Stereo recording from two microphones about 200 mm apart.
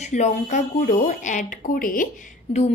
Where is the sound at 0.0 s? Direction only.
35° left (ahead or behind).